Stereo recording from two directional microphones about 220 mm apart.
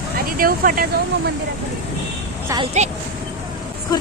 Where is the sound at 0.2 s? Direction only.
40° right (ahead or behind).